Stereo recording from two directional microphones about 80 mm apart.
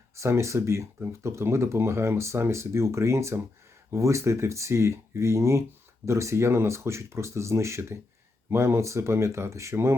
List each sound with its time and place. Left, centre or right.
0.2 s speech: right